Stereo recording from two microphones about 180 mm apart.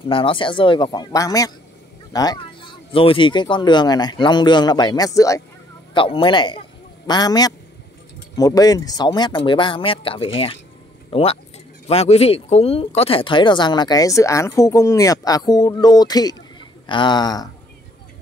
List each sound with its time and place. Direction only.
0.0 s speech: 30° left (ahead or behind)
5.9 s speech: 30° left (ahead or behind)